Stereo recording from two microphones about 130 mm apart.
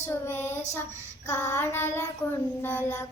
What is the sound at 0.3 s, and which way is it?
Child singing, 20° left (ahead or behind).